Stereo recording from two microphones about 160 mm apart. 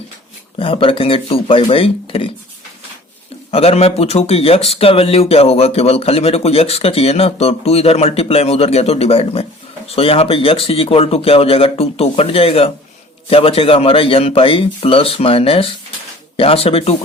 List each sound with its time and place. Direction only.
0.6 s speech: 35° left (ahead or behind)
3.5 s speech: 40° left (ahead or behind)